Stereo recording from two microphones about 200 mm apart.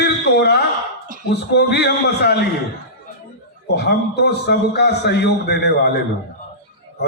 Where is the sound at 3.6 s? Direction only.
55° left (ahead or behind).